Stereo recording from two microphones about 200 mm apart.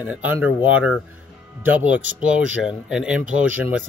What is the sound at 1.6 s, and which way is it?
Speech, 5° right (ahead or behind).